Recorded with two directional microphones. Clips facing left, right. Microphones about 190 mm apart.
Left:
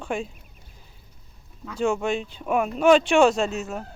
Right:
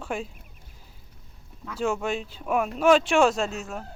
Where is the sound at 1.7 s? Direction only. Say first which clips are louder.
Left 3 dB; 5° right (ahead or behind).